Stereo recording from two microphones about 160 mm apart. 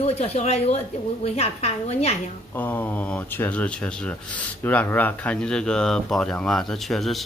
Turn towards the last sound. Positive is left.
turn(degrees=0)  # may be behind; listen again after turning